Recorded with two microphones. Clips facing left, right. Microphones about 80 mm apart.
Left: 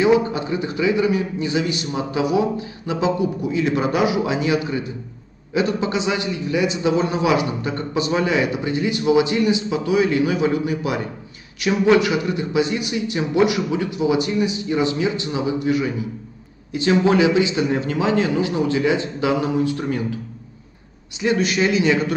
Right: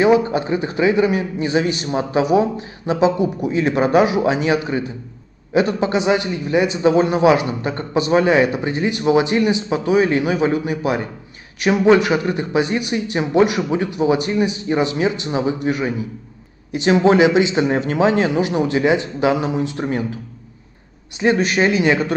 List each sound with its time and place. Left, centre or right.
0.0 s a man's voice: right
17.0 s a man's voice: right
21.2 s a man's voice: right